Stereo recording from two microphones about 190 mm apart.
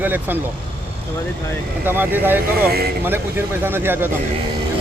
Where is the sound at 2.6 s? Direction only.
55° right (ahead or behind).